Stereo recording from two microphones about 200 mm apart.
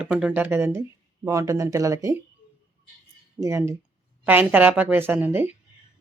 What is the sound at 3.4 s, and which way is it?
Speech, 15° right (ahead or behind).